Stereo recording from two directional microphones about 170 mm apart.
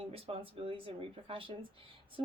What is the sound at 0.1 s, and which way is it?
Speech, 35° right (ahead or behind).